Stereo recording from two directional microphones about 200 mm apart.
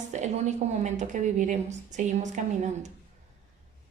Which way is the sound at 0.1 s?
35° right (ahead or behind).